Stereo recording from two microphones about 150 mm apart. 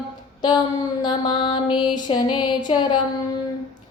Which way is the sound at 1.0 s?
30° left (ahead or behind).